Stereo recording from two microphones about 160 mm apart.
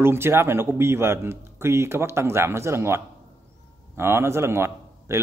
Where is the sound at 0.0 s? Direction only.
15° right (ahead or behind).